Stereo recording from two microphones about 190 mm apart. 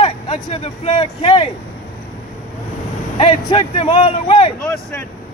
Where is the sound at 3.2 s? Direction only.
25° left (ahead or behind).